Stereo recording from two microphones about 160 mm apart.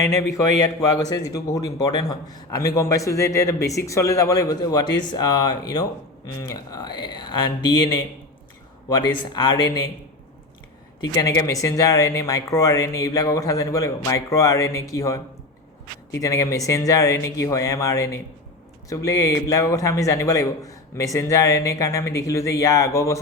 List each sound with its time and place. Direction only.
0.0 s speech: 20° left (ahead or behind)
11.0 s speech: 20° left (ahead or behind)